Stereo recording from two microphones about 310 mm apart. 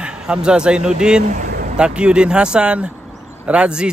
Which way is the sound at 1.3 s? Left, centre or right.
Right.